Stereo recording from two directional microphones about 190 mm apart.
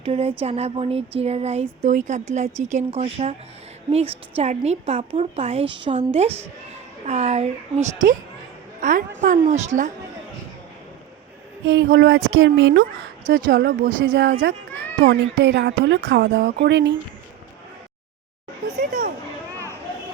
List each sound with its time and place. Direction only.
0.0 s speech: 30° right (ahead or behind)
11.7 s speech: 65° right (ahead or behind)
13.5 s speech: 50° right (ahead or behind)
18.8 s a sound: 50° right (ahead or behind)